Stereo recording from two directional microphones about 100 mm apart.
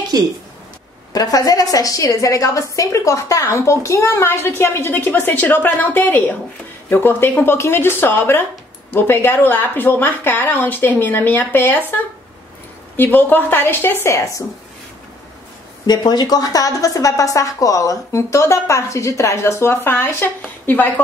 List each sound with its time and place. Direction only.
0.1 s a woman's voice: 40° right (ahead or behind)
1.1 s a woman's voice: 40° left (ahead or behind)
15.9 s a woman's voice: 45° left (ahead or behind); by 20.9 s 20° left (ahead or behind)